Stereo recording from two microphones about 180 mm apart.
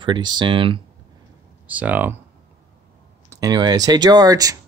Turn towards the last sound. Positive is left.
turn(degrees=-20)  # may be behind; listen again after turning